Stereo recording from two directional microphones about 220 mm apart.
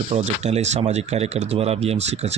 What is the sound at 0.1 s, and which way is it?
Speech, 30° right (ahead or behind).